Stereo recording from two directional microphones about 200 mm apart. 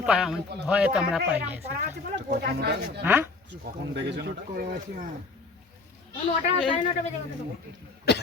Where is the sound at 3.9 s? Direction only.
60° right (ahead or behind).